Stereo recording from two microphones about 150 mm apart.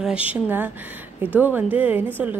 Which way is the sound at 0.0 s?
10° right (ahead or behind).